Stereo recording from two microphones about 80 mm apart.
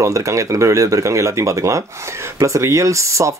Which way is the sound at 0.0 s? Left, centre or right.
Right.